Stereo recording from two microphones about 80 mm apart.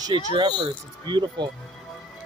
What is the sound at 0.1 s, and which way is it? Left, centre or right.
Speech, right.